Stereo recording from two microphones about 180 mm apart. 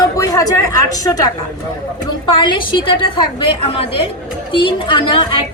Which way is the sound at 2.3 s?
25° left (ahead or behind).